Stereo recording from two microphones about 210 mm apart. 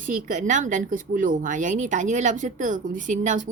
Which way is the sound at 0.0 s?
35° right (ahead or behind).